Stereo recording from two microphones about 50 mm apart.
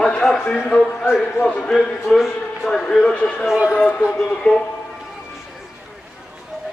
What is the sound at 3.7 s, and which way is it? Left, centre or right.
Speech, left.